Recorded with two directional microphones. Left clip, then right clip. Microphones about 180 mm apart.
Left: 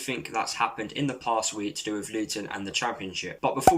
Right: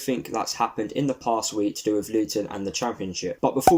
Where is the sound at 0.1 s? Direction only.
40° right (ahead or behind).